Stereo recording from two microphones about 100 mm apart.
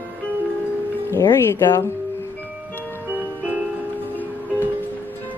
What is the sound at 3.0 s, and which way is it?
Music, 15° right (ahead or behind).